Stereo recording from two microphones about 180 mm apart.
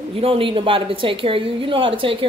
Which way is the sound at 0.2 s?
30° right (ahead or behind).